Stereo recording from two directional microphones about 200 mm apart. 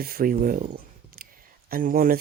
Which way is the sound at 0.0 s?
45° right (ahead or behind).